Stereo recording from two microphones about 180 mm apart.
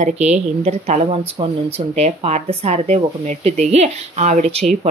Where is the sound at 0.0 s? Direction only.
40° right (ahead or behind).